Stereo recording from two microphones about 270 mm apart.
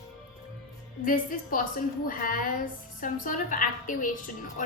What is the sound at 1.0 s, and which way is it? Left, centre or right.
A woman's voice, left.